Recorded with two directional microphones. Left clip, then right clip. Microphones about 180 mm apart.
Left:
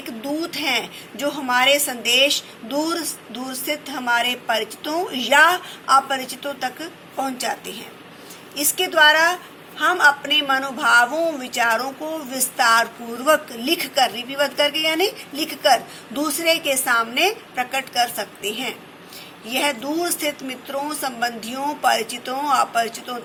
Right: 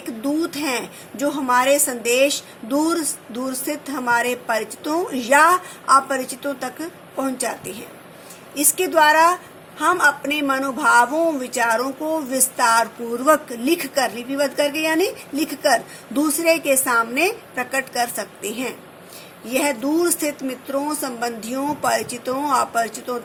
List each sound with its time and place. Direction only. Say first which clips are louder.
0.2 s a woman's voice: right 2 dB; 50° right (ahead or behind)